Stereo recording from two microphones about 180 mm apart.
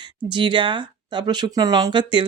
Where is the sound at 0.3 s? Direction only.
25° right (ahead or behind).